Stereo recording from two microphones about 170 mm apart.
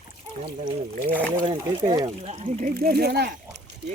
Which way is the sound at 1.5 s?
25° right (ahead or behind).